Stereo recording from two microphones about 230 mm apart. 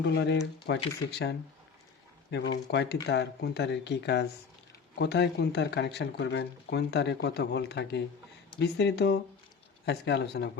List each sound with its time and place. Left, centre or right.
0.0 s speech: left
2.3 s speech: left